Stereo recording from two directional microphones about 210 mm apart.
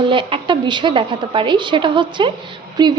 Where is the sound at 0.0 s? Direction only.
25° right (ahead or behind).